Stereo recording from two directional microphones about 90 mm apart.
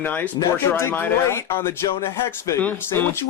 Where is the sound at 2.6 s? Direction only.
20° left (ahead or behind).